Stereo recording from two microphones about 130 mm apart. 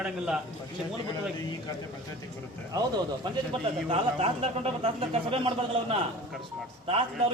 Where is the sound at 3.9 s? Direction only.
50° right (ahead or behind).